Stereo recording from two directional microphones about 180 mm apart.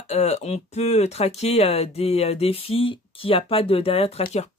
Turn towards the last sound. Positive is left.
turn(degrees=30)  # may be behind; listen again after turning